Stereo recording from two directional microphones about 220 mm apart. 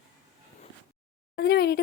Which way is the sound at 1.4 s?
45° left (ahead or behind).